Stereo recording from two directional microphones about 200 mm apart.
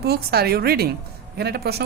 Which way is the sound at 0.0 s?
50° right (ahead or behind).